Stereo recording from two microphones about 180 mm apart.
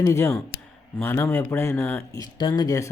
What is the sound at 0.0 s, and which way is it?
Speech, 15° left (ahead or behind).